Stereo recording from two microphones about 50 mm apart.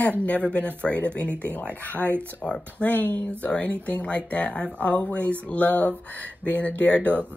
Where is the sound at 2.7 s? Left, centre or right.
Left.